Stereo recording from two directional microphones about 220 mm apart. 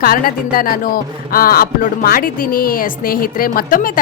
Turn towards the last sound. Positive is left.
turn(degrees=40)  # may be behind; listen again after turning